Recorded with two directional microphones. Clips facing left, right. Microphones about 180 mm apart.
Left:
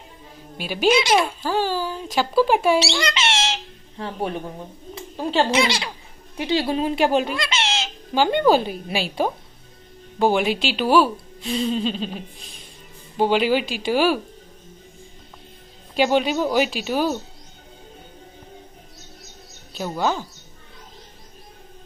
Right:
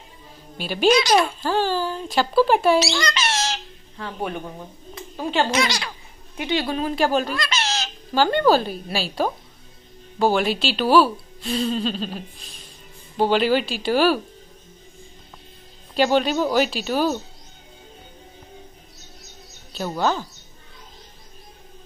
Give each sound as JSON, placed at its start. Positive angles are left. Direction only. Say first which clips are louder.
{"t": 0.6, "sound": "a woman's voice", "louder": "right 1 dB", "side_deg": 10}
{"t": 2.8, "sound": "bird", "louder": "even", "side_deg": 25}
{"t": 4.4, "sound": "speech", "louder": "left 1 dB", "side_deg": 5}
{"t": 5.3, "sound": "speech", "louder": "left 2 dB", "side_deg": 30}
{"t": 8.2, "sound": "a woman's voice", "louder": "even", "side_deg": 15}
{"t": 13.2, "sound": "a woman's voice", "louder": "even", "side_deg": 10}
{"t": 16.0, "sound": "a woman's voice", "louder": "even", "side_deg": 10}
{"t": 19.8, "sound": "a woman's voice", "louder": "right 1 dB", "side_deg": 10}